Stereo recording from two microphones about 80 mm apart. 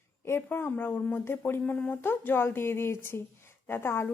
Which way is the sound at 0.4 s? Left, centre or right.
Left.